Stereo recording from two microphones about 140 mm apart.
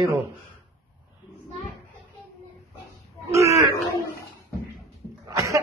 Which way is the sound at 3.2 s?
20° right (ahead or behind).